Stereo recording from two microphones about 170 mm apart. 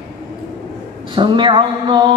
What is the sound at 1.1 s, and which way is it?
Speech, 30° right (ahead or behind).